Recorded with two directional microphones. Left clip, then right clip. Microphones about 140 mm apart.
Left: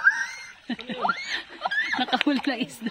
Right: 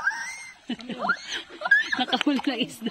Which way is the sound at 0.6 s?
10° left (ahead or behind).